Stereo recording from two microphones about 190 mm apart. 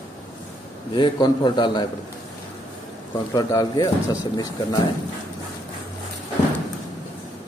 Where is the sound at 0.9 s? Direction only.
25° left (ahead or behind).